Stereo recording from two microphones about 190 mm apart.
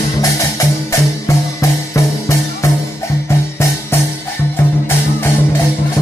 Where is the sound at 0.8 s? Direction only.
15° left (ahead or behind).